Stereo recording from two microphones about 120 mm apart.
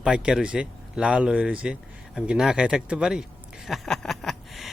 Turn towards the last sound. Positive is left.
turn(degrees=0)  # may be behind; listen again after turning